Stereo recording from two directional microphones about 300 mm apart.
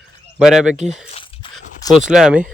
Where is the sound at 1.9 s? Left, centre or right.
Centre.